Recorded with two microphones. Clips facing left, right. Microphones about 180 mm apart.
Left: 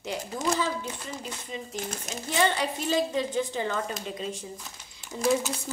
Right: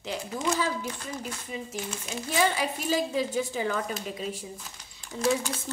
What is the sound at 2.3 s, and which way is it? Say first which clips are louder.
A woman's voice: left 1 dB; 5° right (ahead or behind).